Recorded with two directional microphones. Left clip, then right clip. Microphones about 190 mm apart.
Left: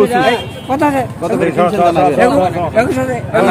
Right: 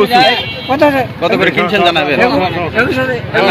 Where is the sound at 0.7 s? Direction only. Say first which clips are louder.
Right 3 dB; 15° right (ahead or behind).